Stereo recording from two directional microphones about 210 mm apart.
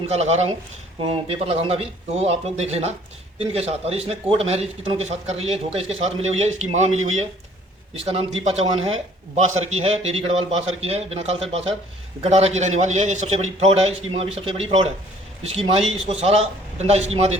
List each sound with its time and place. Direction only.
0.1 s a man's voice: 30° right (ahead or behind)